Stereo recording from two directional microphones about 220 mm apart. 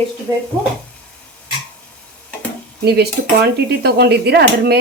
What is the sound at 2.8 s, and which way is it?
Speech, 45° right (ahead or behind).